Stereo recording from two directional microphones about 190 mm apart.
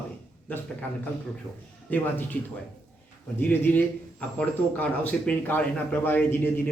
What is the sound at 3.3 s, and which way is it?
Speech, 10° left (ahead or behind).